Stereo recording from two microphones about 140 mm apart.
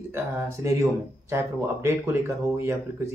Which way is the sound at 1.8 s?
15° right (ahead or behind).